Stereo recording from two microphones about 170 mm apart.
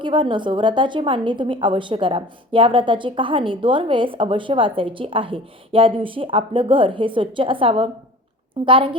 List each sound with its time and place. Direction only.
0.0 s a woman's voice: 30° right (ahead or behind)